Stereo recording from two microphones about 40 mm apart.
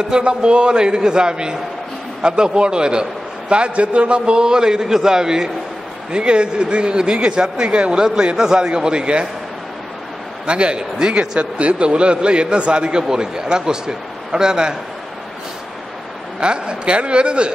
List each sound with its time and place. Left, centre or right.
0.2 s a man's voice: right
10.4 s a man's voice: right
16.3 s a man's voice: right